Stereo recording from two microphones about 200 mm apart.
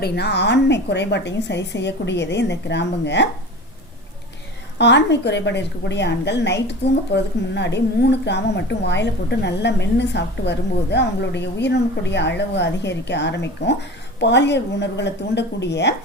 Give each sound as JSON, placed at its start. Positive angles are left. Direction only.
{"t": 0.0, "sound": "a woman's voice", "side_deg": 55}
{"t": 4.8, "sound": "a woman's voice", "side_deg": 60}